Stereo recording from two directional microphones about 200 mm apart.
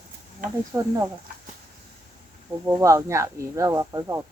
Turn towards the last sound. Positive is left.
turn(degrees=-15)  # may be behind; listen again after turning